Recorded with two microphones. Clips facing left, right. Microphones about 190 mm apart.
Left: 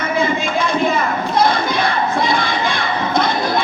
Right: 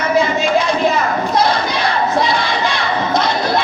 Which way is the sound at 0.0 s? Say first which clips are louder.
Right 3 dB; 55° left (ahead or behind).